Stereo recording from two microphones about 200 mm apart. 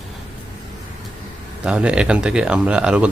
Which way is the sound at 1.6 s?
5° right (ahead or behind).